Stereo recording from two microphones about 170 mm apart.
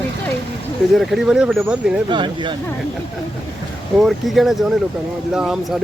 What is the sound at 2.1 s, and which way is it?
Speech, 30° right (ahead or behind).